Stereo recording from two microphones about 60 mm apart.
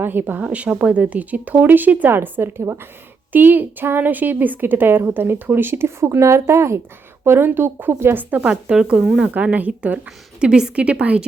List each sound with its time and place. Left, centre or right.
0.0 s a woman's voice: right
7.3 s a woman's voice: right
8.2 s speech: right
8.4 s a woman's voice: centre
9.3 s speech: right
10.4 s a woman's voice: centre